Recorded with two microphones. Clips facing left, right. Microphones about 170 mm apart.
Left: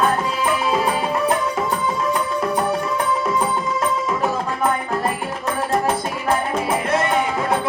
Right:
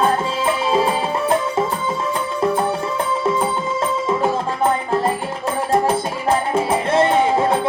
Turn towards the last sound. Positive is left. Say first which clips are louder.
# right 4 dB
turn(degrees=-25)  # may be behind; listen again after turning